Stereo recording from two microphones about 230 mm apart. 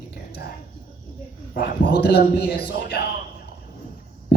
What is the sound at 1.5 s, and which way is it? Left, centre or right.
Speech, left.